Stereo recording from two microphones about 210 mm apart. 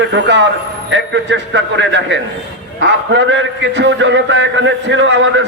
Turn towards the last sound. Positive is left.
turn(degrees=-60)  # may be behind; listen again after turning